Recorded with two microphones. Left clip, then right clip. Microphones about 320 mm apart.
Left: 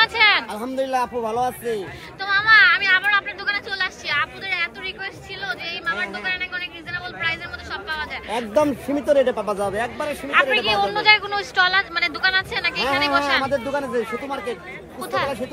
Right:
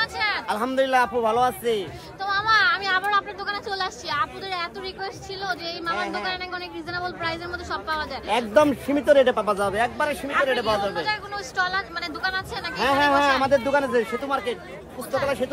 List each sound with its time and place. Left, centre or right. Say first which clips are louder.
0.0 s speech: left 9 dB; centre
2.2 s a sound: left 6 dB; centre
5.9 s speech: left 2 dB; centre
8.3 s speech: right 1 dB; centre